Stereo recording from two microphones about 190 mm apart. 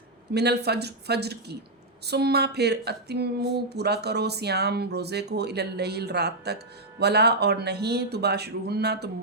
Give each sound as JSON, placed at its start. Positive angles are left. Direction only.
{"t": 0.3, "sound": "speech", "side_deg": -60}